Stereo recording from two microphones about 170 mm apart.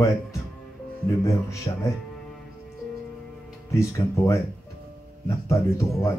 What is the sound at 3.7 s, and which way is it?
Speech, 15° left (ahead or behind).